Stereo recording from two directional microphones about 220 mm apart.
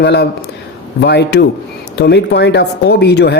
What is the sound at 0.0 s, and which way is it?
Speech, 50° left (ahead or behind).